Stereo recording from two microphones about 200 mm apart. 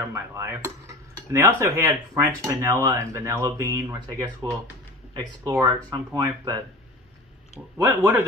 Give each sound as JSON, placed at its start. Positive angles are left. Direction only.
{"t": 0.1, "sound": "a sound", "side_deg": -15}
{"t": 1.3, "sound": "speech", "side_deg": -15}
{"t": 7.7, "sound": "speech", "side_deg": -10}